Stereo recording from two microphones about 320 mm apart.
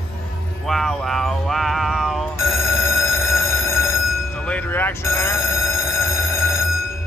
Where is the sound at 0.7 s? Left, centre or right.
Centre.